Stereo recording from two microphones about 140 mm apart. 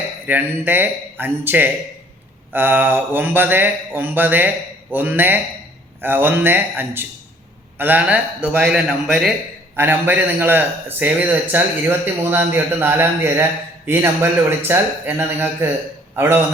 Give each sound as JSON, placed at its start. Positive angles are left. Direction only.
{"t": 0.3, "sound": "a man's voice", "side_deg": -15}